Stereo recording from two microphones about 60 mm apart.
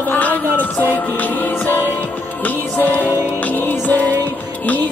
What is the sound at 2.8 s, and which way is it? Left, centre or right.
Music, left.